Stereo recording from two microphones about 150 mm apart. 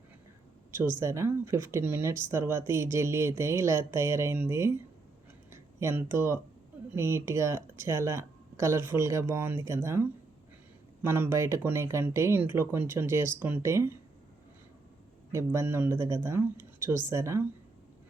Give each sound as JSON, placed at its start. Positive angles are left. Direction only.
{"t": 0.7, "sound": "speech", "side_deg": -15}
{"t": 5.5, "sound": "a sound", "side_deg": -15}
{"t": 6.9, "sound": "speech", "side_deg": -15}
{"t": 15.3, "sound": "speech", "side_deg": -20}